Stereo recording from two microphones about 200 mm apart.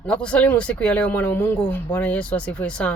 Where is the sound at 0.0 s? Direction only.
5° left (ahead or behind).